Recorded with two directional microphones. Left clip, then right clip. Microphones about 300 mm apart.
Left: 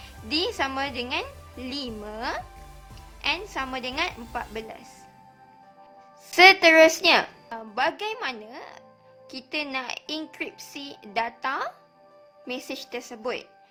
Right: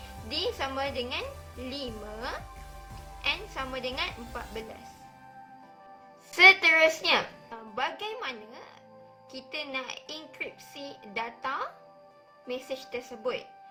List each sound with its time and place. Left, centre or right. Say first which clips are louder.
0.3 s a woman's voice: left 5 dB; left
6.3 s a woman's voice: left 4 dB; left